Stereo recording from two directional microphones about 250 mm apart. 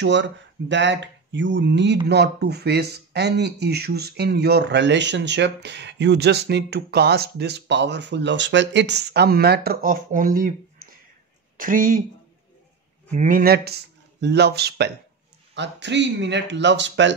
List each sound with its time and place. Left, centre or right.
0.0 s speech: right
13.1 s speech: right